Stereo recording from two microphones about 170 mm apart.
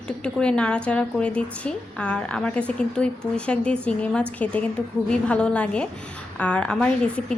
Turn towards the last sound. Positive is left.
turn(degrees=5)  # may be behind; listen again after turning